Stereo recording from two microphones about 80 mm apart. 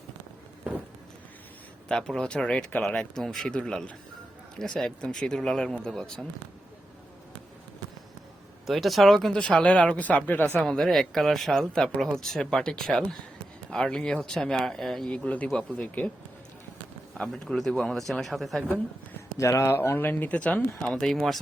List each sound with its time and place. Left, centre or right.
1.9 s speech: centre
8.6 s speech: centre
10.6 s speech: centre
17.2 s speech: centre
19.4 s speech: left; by 21.3 s centre